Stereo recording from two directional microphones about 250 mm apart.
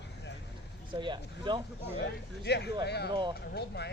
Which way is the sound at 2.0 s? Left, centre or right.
Left.